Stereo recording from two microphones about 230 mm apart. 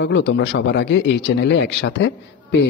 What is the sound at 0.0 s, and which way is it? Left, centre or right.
Speech, left.